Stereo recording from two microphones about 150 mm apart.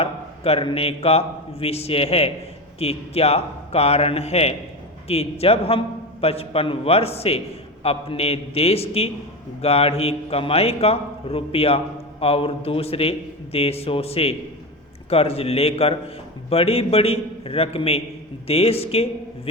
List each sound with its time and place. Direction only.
0.0 s a man's voice: 40° left (ahead or behind)